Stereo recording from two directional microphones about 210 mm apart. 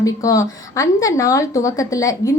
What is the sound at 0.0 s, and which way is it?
A woman's voice, 15° left (ahead or behind).